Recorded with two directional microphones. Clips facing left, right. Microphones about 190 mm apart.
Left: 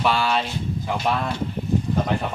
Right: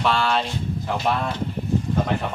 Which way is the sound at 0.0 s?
5° left (ahead or behind).